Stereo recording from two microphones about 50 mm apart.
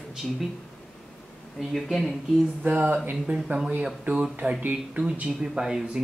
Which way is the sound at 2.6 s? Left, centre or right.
Right.